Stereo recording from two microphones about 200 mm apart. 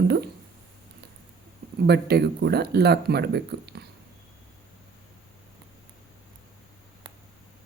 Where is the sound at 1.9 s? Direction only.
55° right (ahead or behind).